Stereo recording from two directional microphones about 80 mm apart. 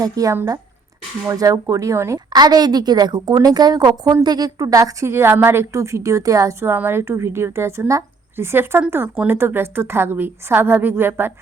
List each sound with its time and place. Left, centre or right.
0.0 s speech: right
1.4 s speech: right
2.3 s a woman's voice: right